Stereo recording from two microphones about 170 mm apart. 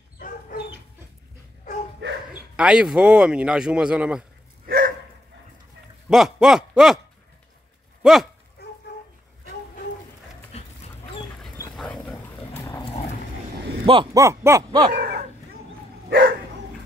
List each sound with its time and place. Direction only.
1.6 s a sound: 45° left (ahead or behind)
2.5 s speech: 5° right (ahead or behind)
4.6 s dog: 65° right (ahead or behind)
6.0 s a sound: 5° right (ahead or behind)
8.0 s speech: centre (ahead or behind)
8.6 s a sound: 70° left (ahead or behind)
10.5 s dog: 35° left (ahead or behind)
11.7 s dog: 5° left (ahead or behind)
12.8 s dog: 35° left (ahead or behind)
14.1 s a sound: 15° right (ahead or behind)
15.0 s dog: 65° right (ahead or behind)
16.1 s dog: 75° right (ahead or behind)